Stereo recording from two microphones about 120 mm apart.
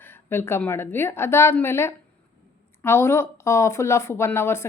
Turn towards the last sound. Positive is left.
turn(degrees=20)  # may be behind; listen again after turning